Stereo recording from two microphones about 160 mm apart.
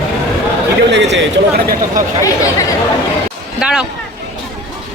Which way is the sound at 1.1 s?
75° right (ahead or behind).